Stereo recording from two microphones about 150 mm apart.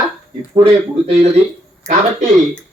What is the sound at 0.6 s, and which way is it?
Speech, 40° right (ahead or behind).